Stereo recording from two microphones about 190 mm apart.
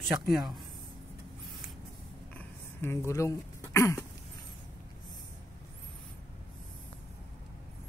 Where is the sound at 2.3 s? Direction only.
10° left (ahead or behind).